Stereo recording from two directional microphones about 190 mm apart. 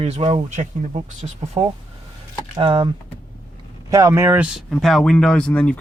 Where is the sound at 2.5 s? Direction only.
25° right (ahead or behind).